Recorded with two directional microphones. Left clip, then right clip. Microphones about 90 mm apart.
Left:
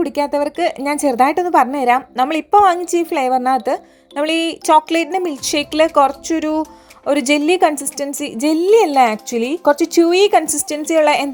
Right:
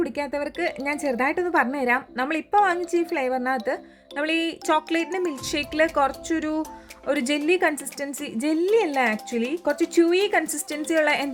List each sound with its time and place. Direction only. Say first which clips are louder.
0.0 s a woman's voice: left 9 dB; 35° left (ahead or behind)
10.5 s a woman's voice: left 8 dB; 25° left (ahead or behind)